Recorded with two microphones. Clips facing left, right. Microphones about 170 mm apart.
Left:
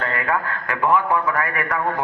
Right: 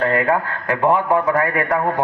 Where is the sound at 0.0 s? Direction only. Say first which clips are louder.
Right 6 dB; 25° right (ahead or behind).